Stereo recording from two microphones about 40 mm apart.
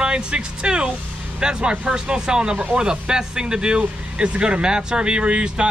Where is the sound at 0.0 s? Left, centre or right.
Right.